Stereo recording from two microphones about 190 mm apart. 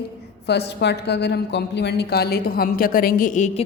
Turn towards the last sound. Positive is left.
turn(degrees=40)  # may be behind; listen again after turning